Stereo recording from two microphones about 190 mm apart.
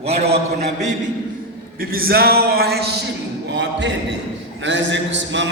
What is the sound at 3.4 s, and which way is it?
A man's voice, 65° right (ahead or behind).